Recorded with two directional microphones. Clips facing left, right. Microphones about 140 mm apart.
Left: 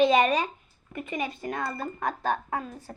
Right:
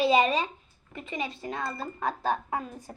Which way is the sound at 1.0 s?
25° right (ahead or behind).